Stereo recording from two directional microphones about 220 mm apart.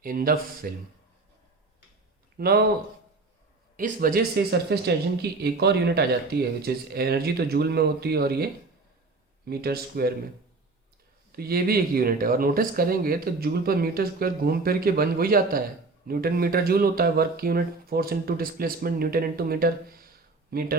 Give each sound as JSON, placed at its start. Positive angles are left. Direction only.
{"t": 0.0, "sound": "speech", "side_deg": -40}
{"t": 2.4, "sound": "speech", "side_deg": -45}
{"t": 3.8, "sound": "speech", "side_deg": -40}
{"t": 9.5, "sound": "speech", "side_deg": -45}
{"t": 11.3, "sound": "speech", "side_deg": -45}